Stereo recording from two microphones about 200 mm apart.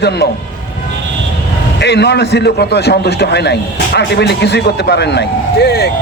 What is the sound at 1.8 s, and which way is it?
A man's voice, 55° left (ahead or behind).